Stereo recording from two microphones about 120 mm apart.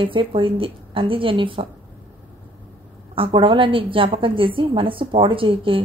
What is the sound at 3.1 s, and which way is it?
A woman's voice, 45° right (ahead or behind).